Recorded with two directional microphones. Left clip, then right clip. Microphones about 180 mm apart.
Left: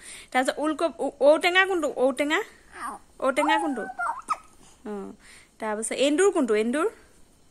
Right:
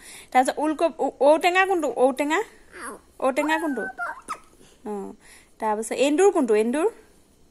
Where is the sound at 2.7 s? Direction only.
25° left (ahead or behind).